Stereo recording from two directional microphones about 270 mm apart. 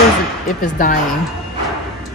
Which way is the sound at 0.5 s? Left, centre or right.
Left.